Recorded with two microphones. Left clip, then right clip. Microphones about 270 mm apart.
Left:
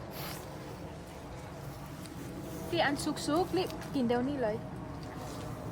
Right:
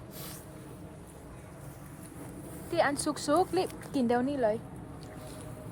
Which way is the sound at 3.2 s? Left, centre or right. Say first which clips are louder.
Right 4 dB; right.